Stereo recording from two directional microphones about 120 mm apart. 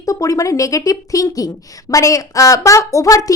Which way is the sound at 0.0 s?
25° left (ahead or behind).